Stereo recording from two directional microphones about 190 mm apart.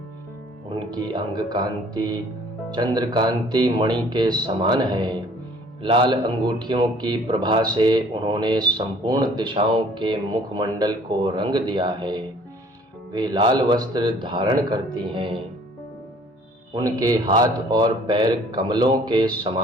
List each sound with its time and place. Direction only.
0.8 s speech: 25° right (ahead or behind)
16.7 s speech: 20° right (ahead or behind)